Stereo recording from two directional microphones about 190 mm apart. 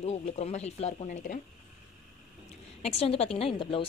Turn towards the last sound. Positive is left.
turn(degrees=25)  # may be behind; listen again after turning